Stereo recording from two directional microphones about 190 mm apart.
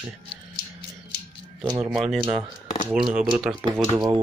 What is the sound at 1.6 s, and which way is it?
Speech, 25° right (ahead or behind).